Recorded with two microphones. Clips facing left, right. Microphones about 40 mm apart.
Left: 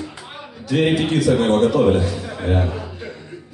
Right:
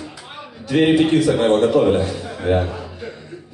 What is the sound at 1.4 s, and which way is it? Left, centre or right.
Speech, right.